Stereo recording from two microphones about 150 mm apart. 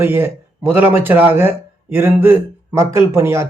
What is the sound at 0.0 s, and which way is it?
Speech, 15° right (ahead or behind).